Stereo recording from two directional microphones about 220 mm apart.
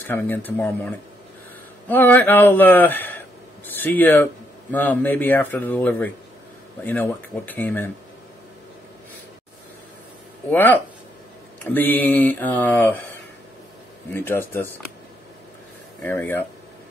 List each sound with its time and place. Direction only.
0.1 s speech: 10° left (ahead or behind)
10.5 s speech: 10° left (ahead or behind)
14.1 s speech: 10° left (ahead or behind)
16.0 s speech: 10° left (ahead or behind)